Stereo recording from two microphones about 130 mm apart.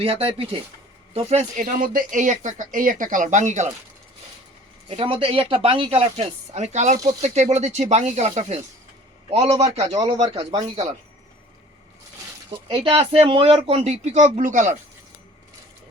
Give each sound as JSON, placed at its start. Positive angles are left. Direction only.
{"t": 0.0, "sound": "speech", "side_deg": -45}
{"t": 1.1, "sound": "speech", "side_deg": -60}
{"t": 4.9, "sound": "speech", "side_deg": -45}
{"t": 6.9, "sound": "speech", "side_deg": -30}
{"t": 7.5, "sound": "speech", "side_deg": -60}
{"t": 10.0, "sound": "speech", "side_deg": -30}
{"t": 12.6, "sound": "speech", "side_deg": -45}